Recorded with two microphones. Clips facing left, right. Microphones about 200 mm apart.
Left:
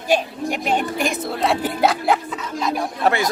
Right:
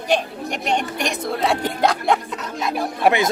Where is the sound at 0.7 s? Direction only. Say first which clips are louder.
Left 1 dB; 5° left (ahead or behind).